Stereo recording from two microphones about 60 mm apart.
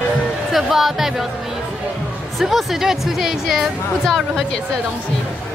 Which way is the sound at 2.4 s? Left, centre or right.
Centre.